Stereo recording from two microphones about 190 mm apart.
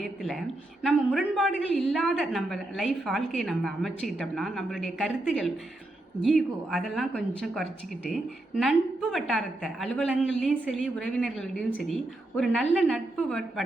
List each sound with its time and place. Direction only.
0.0 s a woman's voice: centre (ahead or behind)